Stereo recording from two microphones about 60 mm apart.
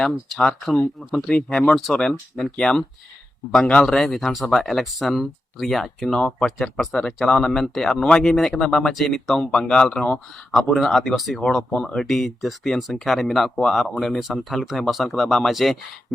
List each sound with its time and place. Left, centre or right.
0.0 s speech: centre
11.3 s speech: centre